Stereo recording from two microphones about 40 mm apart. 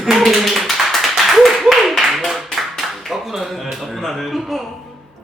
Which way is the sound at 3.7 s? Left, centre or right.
Centre.